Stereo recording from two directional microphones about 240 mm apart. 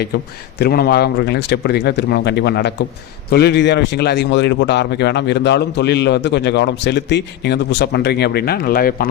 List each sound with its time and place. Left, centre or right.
0.6 s speech: left